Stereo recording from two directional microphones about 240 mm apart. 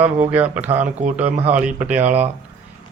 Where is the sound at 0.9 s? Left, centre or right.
Right.